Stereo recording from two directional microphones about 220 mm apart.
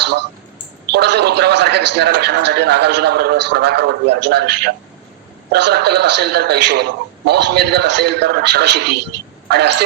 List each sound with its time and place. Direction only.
0.9 s a man's voice: 50° right (ahead or behind)